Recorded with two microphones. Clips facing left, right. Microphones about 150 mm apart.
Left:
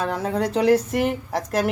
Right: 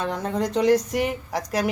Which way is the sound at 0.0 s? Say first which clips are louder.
Left 2 dB; 5° left (ahead or behind).